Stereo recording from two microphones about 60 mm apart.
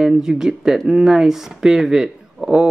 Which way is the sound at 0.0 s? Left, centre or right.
Centre.